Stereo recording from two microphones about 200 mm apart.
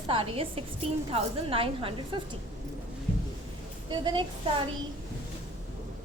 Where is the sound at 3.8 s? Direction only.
25° right (ahead or behind).